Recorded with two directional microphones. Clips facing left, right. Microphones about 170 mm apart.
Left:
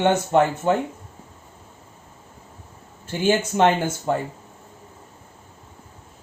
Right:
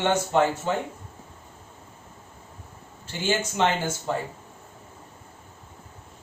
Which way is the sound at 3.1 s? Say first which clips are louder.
Left 6 dB; 55° left (ahead or behind).